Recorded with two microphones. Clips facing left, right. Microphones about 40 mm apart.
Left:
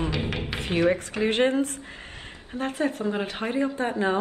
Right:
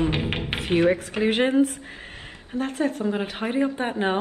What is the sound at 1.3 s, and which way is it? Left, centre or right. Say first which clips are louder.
Speech: right 3 dB; centre.